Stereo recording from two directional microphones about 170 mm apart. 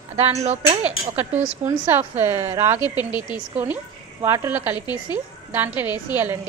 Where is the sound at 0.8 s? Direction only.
10° right (ahead or behind).